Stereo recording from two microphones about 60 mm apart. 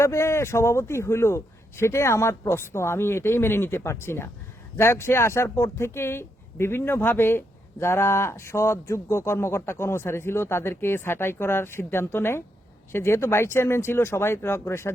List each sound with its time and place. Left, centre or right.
0.0 s speech: left